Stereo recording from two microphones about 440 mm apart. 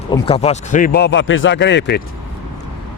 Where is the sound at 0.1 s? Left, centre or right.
Centre.